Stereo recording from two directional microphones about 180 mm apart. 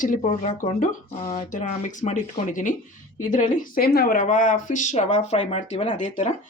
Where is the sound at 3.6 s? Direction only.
55° left (ahead or behind); by 6.3 s 40° left (ahead or behind).